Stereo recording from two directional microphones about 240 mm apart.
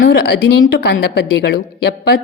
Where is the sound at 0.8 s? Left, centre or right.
Left.